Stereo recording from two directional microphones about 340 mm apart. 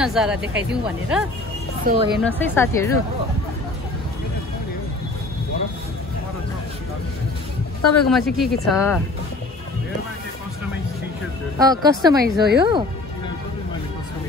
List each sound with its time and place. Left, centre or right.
0.0 s speech: centre
1.9 s speech: right
2.2 s a woman's voice: centre
7.8 s a man's voice: left
8.1 s speech: centre
11.5 s speech: centre
12.2 s speech: right